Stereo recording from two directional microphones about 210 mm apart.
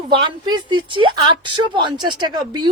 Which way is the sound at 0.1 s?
20° right (ahead or behind).